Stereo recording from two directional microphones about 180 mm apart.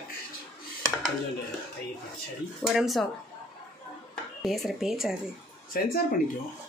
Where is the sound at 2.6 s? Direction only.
Centre (ahead or behind).